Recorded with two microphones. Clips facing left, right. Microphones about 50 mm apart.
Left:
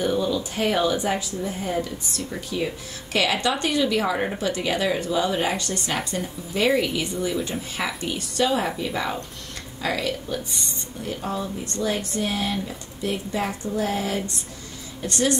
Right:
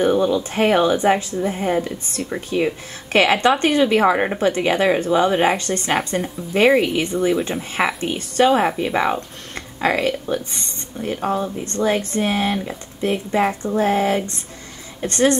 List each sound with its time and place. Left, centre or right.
0.0 s speech: right